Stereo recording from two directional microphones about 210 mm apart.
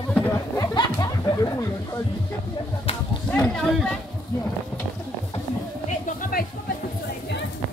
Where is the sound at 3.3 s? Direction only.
5° left (ahead or behind).